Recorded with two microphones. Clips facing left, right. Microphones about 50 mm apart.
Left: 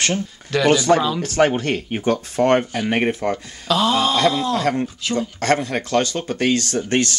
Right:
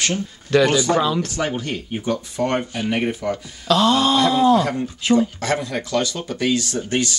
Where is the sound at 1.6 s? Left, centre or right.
Left.